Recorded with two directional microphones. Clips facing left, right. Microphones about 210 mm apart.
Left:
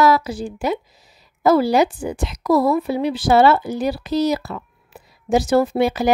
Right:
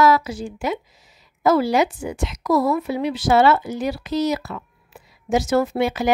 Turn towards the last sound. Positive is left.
turn(degrees=35)  # may be behind; listen again after turning